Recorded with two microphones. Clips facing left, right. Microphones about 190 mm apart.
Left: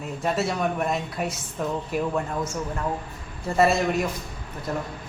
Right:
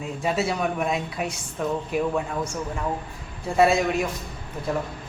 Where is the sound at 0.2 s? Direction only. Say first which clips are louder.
Even; 5° right (ahead or behind).